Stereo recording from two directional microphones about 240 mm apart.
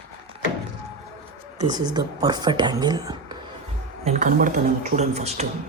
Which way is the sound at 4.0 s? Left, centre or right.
Right.